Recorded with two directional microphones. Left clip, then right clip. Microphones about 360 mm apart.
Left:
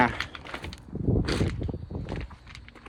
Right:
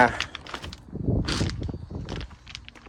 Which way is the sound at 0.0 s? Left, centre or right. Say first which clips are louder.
Right 4 dB; right.